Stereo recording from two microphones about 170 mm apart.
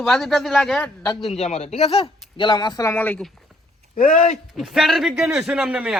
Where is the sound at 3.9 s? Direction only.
50° left (ahead or behind).